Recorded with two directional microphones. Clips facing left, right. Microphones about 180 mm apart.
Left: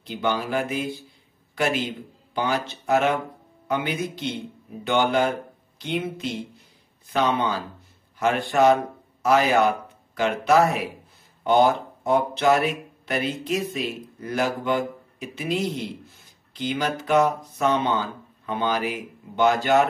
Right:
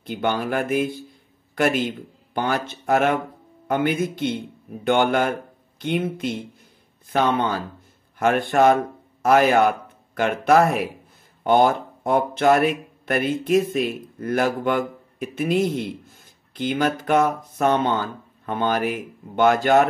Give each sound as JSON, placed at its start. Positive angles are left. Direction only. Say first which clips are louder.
{"t": 0.0, "sound": "a man's voice", "louder": "right 2 dB", "side_deg": -50}